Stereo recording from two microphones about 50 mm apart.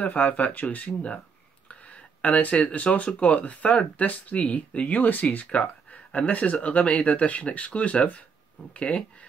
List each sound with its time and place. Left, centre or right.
0.0 s speech: left
1.7 s a sound: left
3.2 s speech: left